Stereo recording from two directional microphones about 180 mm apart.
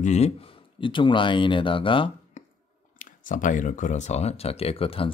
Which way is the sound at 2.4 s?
45° left (ahead or behind).